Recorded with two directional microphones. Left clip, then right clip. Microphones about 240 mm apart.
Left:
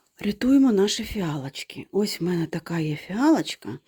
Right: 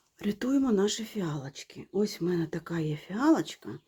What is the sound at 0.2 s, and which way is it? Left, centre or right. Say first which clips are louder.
Speech: left 9 dB; left.